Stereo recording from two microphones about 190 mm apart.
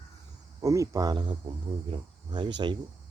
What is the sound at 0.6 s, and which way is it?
Speech, 15° right (ahead or behind).